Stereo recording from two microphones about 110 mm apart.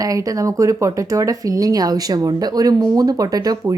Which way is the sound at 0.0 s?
30° right (ahead or behind).